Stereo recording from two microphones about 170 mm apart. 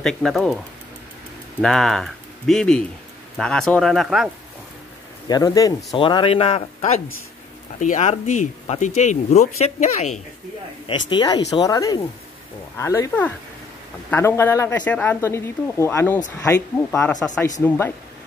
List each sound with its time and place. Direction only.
0.0 s speech: centre (ahead or behind)
1.6 s speech: centre (ahead or behind)
5.3 s speech: 20° left (ahead or behind); by 10.2 s 40° left (ahead or behind)
11.1 s speech: 25° left (ahead or behind)